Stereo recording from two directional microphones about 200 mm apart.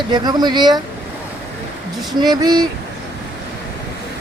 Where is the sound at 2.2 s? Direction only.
20° right (ahead or behind).